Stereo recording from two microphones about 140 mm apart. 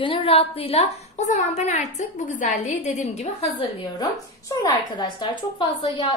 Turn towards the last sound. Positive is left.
turn(degrees=40)  # may be behind; listen again after turning